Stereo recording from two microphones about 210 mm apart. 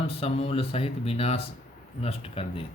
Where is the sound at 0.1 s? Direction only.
30° left (ahead or behind).